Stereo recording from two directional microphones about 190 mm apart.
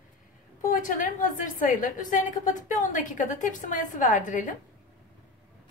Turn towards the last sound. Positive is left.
turn(degrees=45)  # may be behind; listen again after turning